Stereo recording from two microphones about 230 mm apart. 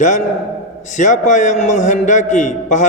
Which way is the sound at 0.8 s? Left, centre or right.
Left.